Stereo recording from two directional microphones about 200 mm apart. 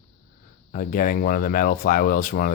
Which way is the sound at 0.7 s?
45° left (ahead or behind).